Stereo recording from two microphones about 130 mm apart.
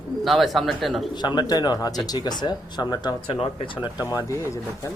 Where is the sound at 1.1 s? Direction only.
35° left (ahead or behind).